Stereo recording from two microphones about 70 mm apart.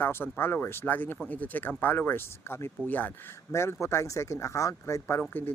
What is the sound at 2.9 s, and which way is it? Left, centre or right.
Speech, left.